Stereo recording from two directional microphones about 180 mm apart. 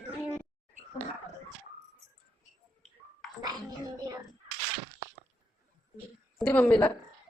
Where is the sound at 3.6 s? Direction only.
20° right (ahead or behind).